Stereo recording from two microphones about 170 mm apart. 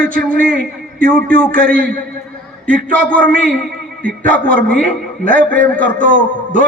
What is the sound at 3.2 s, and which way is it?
A man's voice, 55° right (ahead or behind).